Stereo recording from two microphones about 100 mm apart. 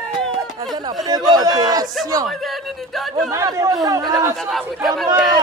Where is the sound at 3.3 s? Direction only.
30° right (ahead or behind).